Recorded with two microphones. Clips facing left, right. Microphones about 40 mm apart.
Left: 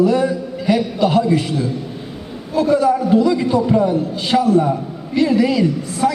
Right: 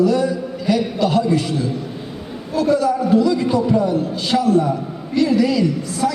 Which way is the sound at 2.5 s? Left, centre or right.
Left.